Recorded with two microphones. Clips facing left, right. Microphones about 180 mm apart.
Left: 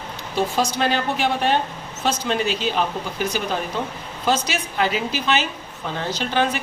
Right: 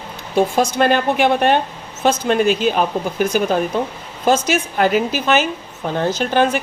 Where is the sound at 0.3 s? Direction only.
50° right (ahead or behind).